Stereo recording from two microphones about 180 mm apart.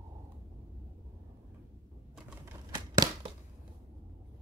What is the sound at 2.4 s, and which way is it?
Typewriter, 25° right (ahead or behind).